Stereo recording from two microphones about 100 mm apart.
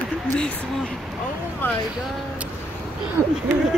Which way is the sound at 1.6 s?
20° left (ahead or behind).